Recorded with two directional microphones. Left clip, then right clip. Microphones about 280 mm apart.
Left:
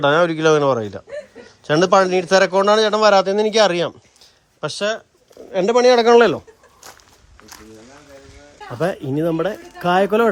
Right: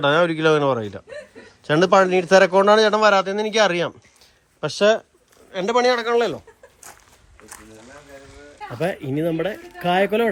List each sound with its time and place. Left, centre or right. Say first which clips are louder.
0.0 s a man's voice: left 2 dB; centre
5.5 s speech: left 5 dB; centre
6.1 s speech: left 8 dB; left
8.8 s speech: left 3 dB; centre